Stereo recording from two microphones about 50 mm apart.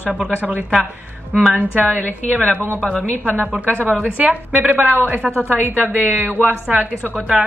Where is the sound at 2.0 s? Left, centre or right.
Left.